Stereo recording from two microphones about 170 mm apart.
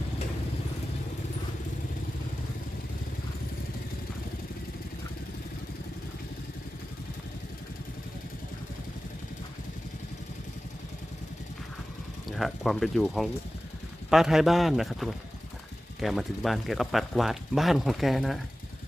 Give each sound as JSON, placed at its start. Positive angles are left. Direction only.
{"t": 12.4, "sound": "speech", "side_deg": 0}